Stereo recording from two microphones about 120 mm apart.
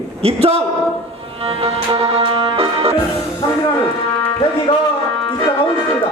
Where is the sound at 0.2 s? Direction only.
55° right (ahead or behind).